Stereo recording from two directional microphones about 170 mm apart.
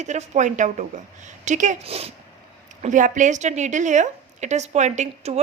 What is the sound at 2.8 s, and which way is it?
Speech, 45° right (ahead or behind).